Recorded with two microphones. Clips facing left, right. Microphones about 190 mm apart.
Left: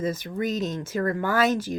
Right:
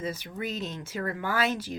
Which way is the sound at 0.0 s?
45° left (ahead or behind).